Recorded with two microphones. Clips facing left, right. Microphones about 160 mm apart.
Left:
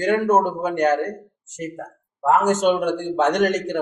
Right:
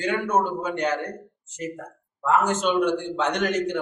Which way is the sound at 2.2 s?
45° left (ahead or behind).